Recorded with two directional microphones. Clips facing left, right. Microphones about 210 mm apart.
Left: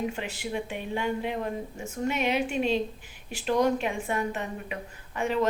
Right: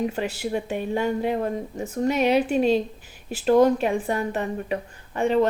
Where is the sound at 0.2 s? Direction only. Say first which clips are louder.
Right 6 dB; 40° right (ahead or behind).